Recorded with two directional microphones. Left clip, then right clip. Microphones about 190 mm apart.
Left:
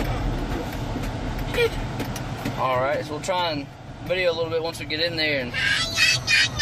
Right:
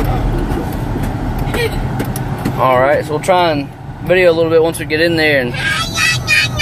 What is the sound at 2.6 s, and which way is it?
Speech, 35° right (ahead or behind).